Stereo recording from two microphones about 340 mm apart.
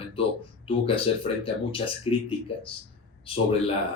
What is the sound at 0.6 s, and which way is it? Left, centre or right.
Speech, centre.